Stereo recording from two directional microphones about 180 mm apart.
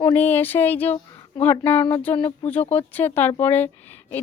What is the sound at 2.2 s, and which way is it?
Speech, 30° left (ahead or behind).